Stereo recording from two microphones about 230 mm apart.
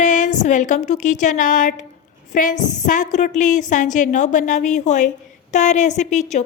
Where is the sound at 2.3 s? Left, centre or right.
Left.